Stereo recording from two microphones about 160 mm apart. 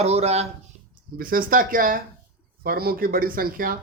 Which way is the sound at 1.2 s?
60° right (ahead or behind).